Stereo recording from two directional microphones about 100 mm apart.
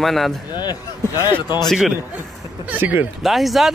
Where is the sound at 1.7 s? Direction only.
5° right (ahead or behind).